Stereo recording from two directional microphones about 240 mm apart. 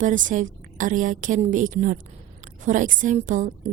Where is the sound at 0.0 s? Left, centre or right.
Right.